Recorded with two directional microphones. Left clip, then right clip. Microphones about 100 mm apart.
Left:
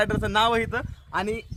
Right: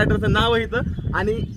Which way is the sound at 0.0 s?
45° left (ahead or behind).